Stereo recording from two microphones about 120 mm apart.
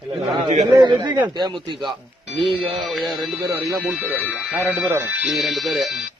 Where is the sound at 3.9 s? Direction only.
15° right (ahead or behind).